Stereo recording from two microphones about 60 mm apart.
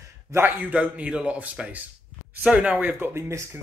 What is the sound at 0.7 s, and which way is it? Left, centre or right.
Speech, right.